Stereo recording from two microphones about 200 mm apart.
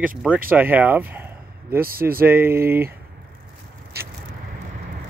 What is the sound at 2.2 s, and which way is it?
Speech, 10° right (ahead or behind).